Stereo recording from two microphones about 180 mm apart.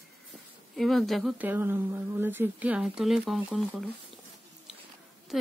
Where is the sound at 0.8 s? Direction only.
Centre (ahead or behind).